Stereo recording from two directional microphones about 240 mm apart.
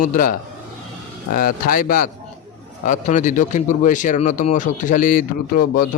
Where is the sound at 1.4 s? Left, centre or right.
Left.